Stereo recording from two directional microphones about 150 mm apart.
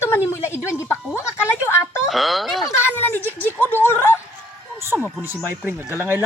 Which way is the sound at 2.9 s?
15° left (ahead or behind).